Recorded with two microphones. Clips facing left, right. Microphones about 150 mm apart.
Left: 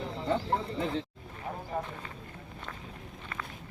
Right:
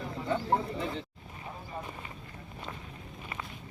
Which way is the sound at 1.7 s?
60° left (ahead or behind).